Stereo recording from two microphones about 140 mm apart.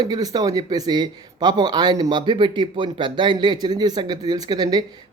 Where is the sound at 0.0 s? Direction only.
25° right (ahead or behind).